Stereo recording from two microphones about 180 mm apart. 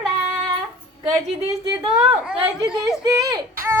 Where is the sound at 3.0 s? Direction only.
20° right (ahead or behind).